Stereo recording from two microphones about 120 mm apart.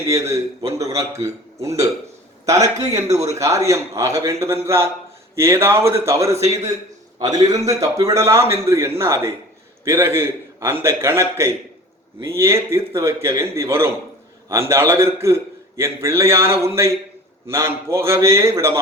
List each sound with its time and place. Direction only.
0.1 s a man's voice: 25° right (ahead or behind)